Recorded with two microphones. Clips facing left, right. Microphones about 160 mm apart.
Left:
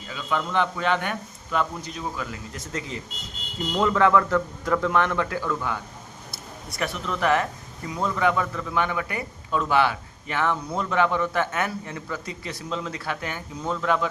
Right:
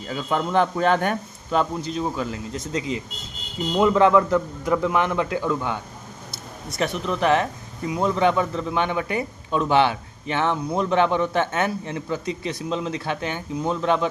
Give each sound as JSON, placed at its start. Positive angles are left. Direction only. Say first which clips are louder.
{"t": 0.1, "sound": "a man's voice", "louder": "right 4 dB", "side_deg": -40}
{"t": 1.5, "sound": "a man's voice", "louder": "right 4 dB", "side_deg": -30}